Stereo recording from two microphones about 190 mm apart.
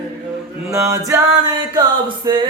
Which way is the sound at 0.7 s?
15° right (ahead or behind).